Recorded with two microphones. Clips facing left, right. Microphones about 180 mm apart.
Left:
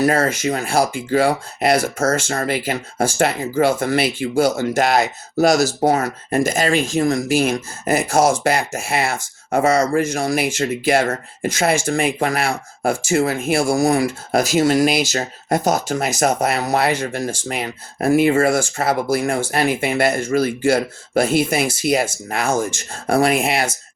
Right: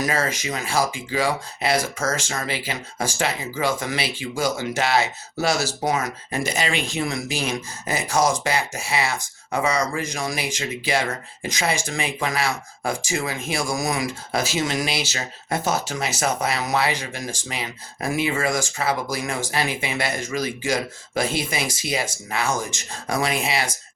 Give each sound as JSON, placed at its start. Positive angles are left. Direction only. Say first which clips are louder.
{"t": 0.0, "sound": "speech", "louder": "left 7 dB", "side_deg": 60}
{"t": 2.4, "sound": "speech", "louder": "left 7 dB", "side_deg": 50}
{"t": 13.6, "sound": "speech", "louder": "left 8 dB", "side_deg": 30}
{"t": 14.4, "sound": "speech", "louder": "left 11 dB", "side_deg": 40}
{"t": 18.8, "sound": "speech", "louder": "left 6 dB", "side_deg": 60}